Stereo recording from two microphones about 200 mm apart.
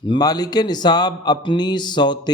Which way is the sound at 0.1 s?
20° left (ahead or behind).